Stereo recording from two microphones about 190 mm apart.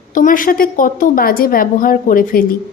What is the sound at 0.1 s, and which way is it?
A woman's voice, 45° left (ahead or behind).